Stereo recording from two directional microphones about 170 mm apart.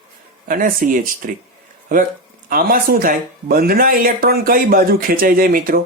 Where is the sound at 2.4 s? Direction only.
55° right (ahead or behind).